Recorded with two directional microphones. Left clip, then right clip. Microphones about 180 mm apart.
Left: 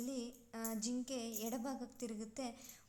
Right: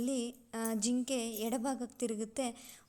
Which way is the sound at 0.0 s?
35° right (ahead or behind).